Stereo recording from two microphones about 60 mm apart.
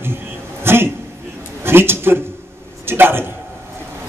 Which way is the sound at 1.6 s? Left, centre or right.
Right.